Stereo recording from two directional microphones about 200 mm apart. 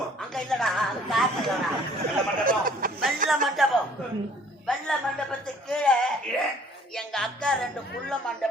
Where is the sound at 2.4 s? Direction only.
45° right (ahead or behind).